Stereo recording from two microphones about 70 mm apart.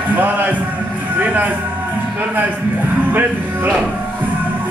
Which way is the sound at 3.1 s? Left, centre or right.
Right.